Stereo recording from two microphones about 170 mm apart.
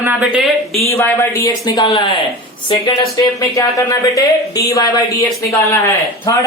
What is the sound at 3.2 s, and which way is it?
A man's voice, 20° left (ahead or behind).